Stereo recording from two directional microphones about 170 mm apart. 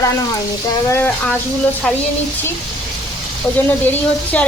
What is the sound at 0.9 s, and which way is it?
Speech, 15° left (ahead or behind).